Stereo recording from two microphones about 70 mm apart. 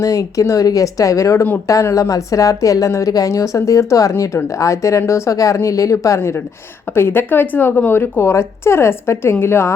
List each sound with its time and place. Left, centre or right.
0.0 s a woman's voice: left